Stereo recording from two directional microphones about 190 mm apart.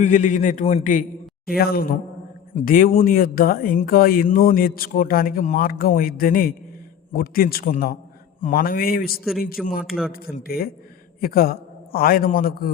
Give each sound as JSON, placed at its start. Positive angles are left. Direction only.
{"t": 0.0, "sound": "a man's voice", "side_deg": 40}
{"t": 1.5, "sound": "speech", "side_deg": 55}
{"t": 9.8, "sound": "a man's voice", "side_deg": 0}
{"t": 10.1, "sound": "a man's voice", "side_deg": 50}